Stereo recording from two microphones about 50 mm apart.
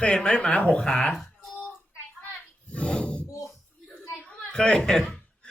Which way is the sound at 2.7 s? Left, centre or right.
Left.